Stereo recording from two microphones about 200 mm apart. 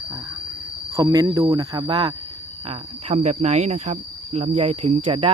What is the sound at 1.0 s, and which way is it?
Speech, 20° right (ahead or behind).